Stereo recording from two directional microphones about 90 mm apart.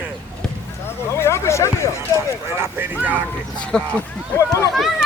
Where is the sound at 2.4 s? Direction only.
25° right (ahead or behind).